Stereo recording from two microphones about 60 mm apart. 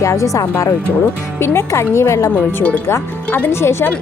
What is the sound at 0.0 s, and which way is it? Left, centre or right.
Speech, left.